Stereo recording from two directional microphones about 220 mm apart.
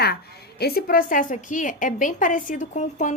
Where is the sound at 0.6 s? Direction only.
45° left (ahead or behind).